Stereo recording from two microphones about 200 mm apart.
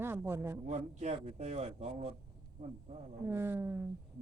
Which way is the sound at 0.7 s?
35° right (ahead or behind).